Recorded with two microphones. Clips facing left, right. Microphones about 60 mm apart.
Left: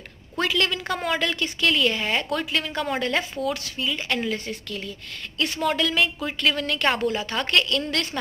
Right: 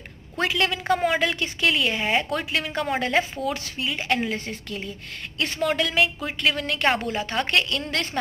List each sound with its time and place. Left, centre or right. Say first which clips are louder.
0.4 s a woman's voice: even; right